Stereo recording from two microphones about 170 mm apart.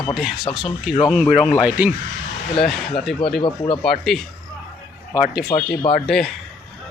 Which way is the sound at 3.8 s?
Centre (ahead or behind).